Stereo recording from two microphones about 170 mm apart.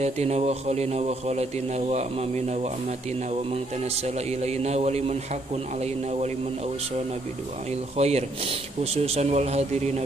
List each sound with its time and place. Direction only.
0.0 s a man's voice: 40° right (ahead or behind)
8.0 s a man's voice: 40° right (ahead or behind)